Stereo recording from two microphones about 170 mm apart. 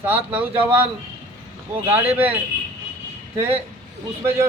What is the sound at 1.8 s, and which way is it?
Speech, 10° right (ahead or behind).